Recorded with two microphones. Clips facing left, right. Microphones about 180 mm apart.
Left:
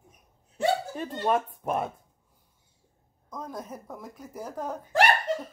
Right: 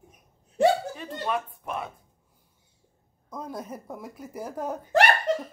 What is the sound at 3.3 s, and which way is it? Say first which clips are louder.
Speech: right 2 dB; 10° right (ahead or behind).